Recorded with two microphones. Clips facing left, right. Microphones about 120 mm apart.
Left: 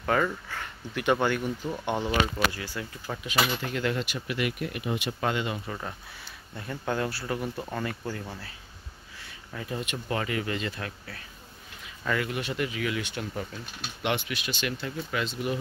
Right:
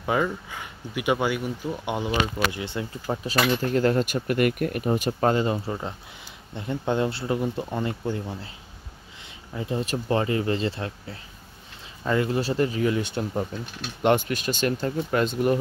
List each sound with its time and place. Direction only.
0.0 s speech: 10° right (ahead or behind)
2.6 s speech: 25° right (ahead or behind)
3.6 s speech: 40° right (ahead or behind)
5.7 s speech: 25° right (ahead or behind)
9.2 s a sound: 20° right (ahead or behind)
9.8 s speech: 30° right (ahead or behind)
14.0 s speech: 45° right (ahead or behind)